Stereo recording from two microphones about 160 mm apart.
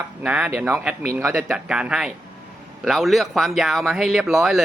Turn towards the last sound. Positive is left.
turn(degrees=0)  # may be behind; listen again after turning